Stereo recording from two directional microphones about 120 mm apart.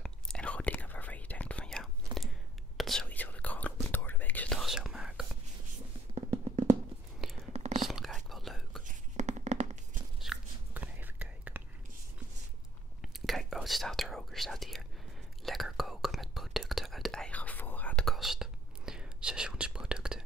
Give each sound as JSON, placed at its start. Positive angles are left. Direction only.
{"t": 0.0, "sound": "whispering", "side_deg": 5}
{"t": 4.6, "sound": "whispering", "side_deg": -5}
{"t": 7.5, "sound": "whispering", "side_deg": -65}
{"t": 7.8, "sound": "whispering", "side_deg": 0}
{"t": 8.8, "sound": "whispering", "side_deg": -75}
{"t": 10.3, "sound": "a sound", "side_deg": 0}
{"t": 10.7, "sound": "whispering", "side_deg": -15}
{"t": 13.0, "sound": "whispering", "side_deg": 0}
{"t": 18.0, "sound": "whispering", "side_deg": 0}